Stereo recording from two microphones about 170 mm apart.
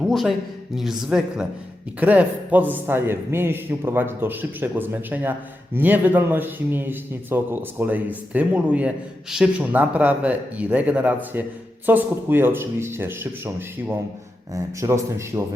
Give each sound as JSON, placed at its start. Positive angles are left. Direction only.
{"t": 0.0, "sound": "a man's voice", "side_deg": 0}